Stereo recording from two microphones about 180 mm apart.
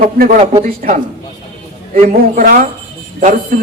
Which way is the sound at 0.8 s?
50° right (ahead or behind).